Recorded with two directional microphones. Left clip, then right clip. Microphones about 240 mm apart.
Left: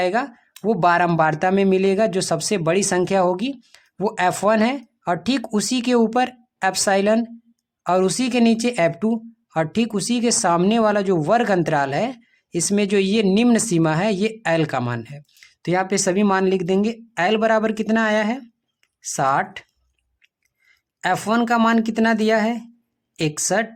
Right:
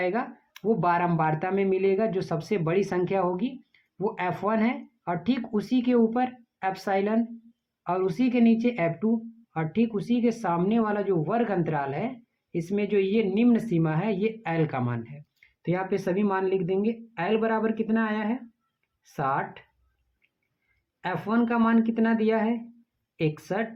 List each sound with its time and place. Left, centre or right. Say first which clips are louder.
0.0 s speech: left 7 dB; left
21.0 s speech: left 8 dB; left